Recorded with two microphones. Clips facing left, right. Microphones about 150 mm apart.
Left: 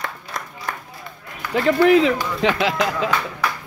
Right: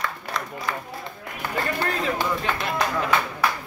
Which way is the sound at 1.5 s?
90° left.